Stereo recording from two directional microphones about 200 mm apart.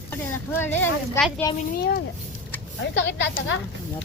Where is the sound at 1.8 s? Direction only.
50° left (ahead or behind).